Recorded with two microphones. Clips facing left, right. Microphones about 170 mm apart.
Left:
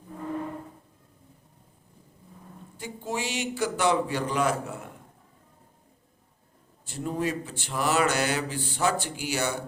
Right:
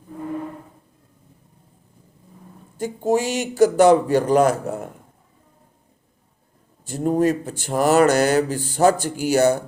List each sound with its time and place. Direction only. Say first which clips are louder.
2.7 s speech: right 13 dB; 45° right (ahead or behind)
6.8 s speech: right 10 dB; 45° right (ahead or behind)